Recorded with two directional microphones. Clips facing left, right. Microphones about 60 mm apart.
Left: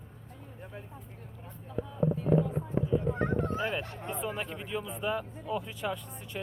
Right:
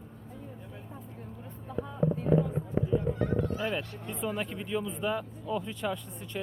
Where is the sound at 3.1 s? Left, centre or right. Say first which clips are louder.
Even; left.